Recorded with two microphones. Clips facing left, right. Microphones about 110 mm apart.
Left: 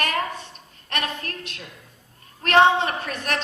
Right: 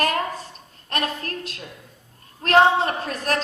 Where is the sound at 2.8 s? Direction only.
35° right (ahead or behind).